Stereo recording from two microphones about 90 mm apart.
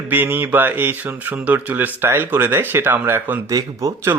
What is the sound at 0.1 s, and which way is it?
Speech, 25° right (ahead or behind).